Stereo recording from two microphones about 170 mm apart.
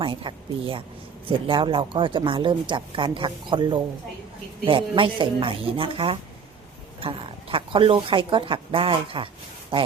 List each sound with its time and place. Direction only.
0.0 s speech: 30° right (ahead or behind)